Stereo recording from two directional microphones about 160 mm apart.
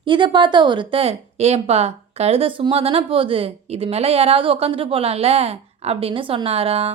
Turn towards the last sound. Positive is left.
turn(degrees=-40)  # may be behind; listen again after turning